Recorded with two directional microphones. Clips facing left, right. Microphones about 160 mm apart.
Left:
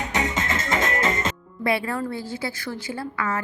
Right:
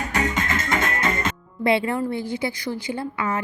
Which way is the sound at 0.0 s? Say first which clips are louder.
Right 1 dB; 20° left (ahead or behind).